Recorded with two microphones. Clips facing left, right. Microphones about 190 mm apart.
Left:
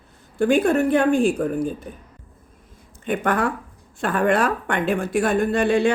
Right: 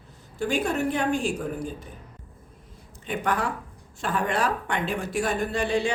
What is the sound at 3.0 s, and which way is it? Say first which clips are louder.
A woman's voice: left 5 dB; 55° left (ahead or behind).